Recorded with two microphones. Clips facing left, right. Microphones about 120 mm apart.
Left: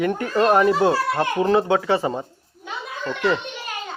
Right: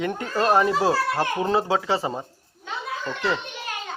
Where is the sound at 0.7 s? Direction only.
30° left (ahead or behind).